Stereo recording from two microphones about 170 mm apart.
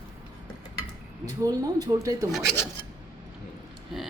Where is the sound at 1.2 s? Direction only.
20° right (ahead or behind).